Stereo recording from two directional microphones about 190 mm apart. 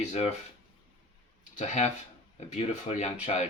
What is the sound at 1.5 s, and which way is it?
Speech, 40° left (ahead or behind).